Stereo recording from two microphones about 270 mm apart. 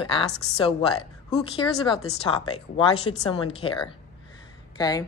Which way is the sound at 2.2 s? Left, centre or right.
Centre.